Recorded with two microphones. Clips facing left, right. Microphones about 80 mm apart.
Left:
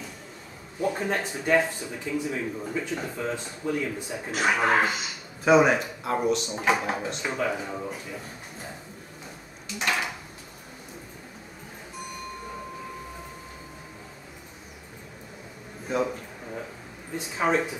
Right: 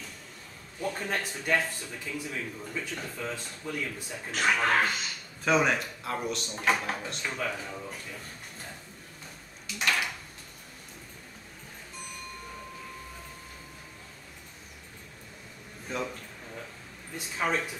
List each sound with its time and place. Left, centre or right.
0.7 s a man's voice: centre
2.3 s speech: centre
2.8 s a man's voice: centre
3.1 s a man's voice: centre
9.8 s drawer open or close: centre
15.9 s a man's voice: centre
17.4 s speech: left